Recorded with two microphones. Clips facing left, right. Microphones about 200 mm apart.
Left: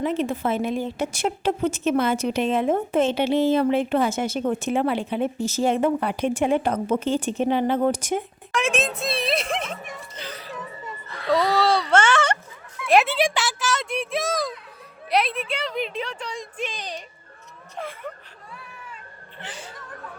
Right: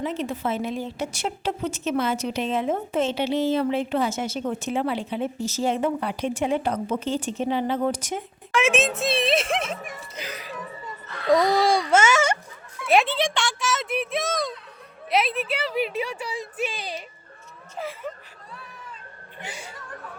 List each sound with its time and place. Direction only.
0.0 s a woman's voice: 55° left (ahead or behind)
8.5 s speech: centre (ahead or behind)
10.2 s music: 10° right (ahead or behind)
11.3 s a woman's voice: 15° right (ahead or behind)
19.4 s a woman's voice: 10° right (ahead or behind)